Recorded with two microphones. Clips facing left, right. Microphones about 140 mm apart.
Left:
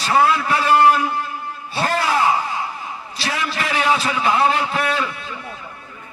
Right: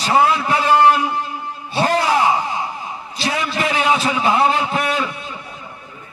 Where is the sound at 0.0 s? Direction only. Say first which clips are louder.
Right 1 dB; 20° right (ahead or behind).